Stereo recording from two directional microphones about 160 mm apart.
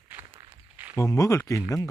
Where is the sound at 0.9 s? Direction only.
20° left (ahead or behind).